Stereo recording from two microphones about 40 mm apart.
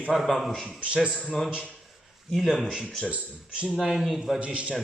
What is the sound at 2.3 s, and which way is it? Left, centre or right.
Speech, centre.